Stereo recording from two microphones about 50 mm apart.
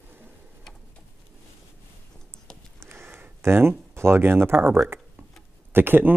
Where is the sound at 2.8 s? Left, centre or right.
Right.